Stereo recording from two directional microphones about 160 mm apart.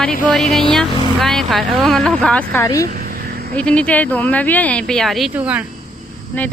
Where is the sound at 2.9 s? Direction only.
65° right (ahead or behind).